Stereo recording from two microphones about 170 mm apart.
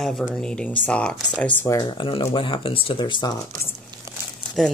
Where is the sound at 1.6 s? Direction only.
25° left (ahead or behind).